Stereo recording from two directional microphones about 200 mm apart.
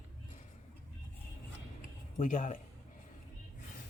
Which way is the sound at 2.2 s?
40° left (ahead or behind).